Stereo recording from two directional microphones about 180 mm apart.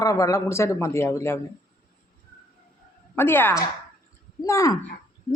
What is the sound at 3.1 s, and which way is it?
Speech, 10° left (ahead or behind).